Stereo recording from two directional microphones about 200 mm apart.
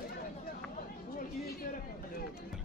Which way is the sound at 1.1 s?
45° left (ahead or behind).